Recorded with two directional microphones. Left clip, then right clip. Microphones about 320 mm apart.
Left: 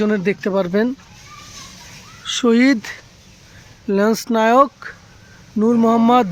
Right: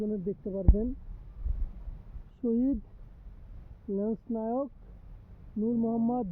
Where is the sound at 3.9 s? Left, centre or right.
Left.